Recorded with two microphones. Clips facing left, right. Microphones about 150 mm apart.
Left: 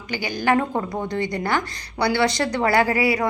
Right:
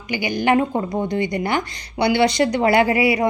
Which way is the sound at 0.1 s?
15° right (ahead or behind).